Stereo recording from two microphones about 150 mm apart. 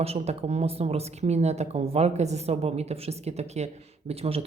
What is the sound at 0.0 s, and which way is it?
Speech, 45° right (ahead or behind).